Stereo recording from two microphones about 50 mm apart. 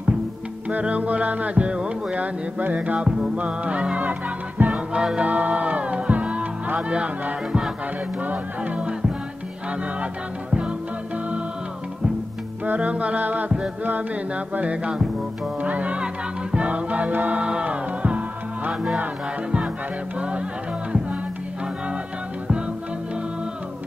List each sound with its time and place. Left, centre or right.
0.7 s music: right
2.1 s music: right
4.9 s music: right
12.6 s music: right
17.4 s music: right
20.2 s music: right